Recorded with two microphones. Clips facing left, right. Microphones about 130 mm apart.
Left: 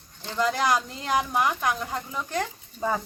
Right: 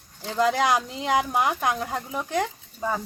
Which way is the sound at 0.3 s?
20° right (ahead or behind).